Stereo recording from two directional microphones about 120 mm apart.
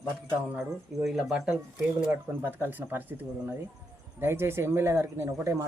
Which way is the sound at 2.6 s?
15° right (ahead or behind).